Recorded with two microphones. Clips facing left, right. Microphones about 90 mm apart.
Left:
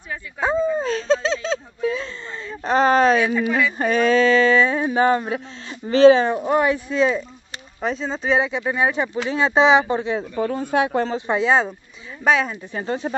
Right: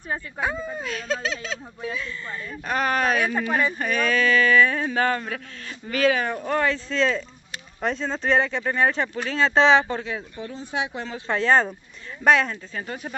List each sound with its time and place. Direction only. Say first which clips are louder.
0.4 s speech: left 11 dB; 30° left (ahead or behind)
3.3 s speech: left 3 dB; 45° right (ahead or behind)
3.7 s speech: left 6 dB; 30° left (ahead or behind)
10.3 s speech: left 10 dB; 65° left (ahead or behind)
11.1 s a woman's voice: right 1 dB; 10° left (ahead or behind)
12.7 s speech: left 12 dB; 30° left (ahead or behind)